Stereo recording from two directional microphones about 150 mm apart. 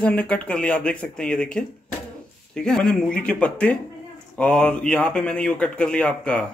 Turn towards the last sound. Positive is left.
turn(degrees=10)  # may be behind; listen again after turning